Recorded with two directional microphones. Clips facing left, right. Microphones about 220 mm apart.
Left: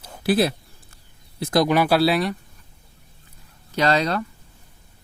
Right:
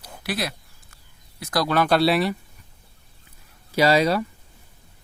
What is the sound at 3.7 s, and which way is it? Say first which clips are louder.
Speech: right 2 dB; 10° right (ahead or behind).